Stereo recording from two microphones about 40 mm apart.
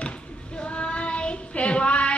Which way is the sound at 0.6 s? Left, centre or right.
Left.